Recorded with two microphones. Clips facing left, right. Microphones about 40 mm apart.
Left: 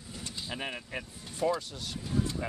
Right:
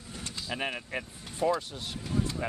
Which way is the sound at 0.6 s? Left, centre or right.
Right.